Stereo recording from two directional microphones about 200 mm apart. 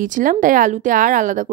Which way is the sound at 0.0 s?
40° right (ahead or behind).